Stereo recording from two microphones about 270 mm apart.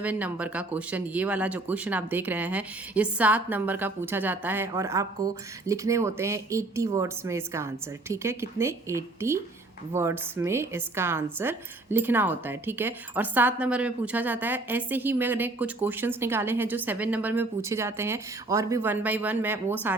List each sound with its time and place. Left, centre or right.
0.0 s a woman's voice: centre